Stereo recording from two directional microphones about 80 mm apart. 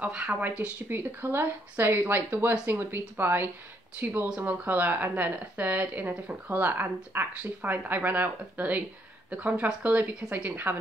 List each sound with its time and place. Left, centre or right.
0.0 s speech: centre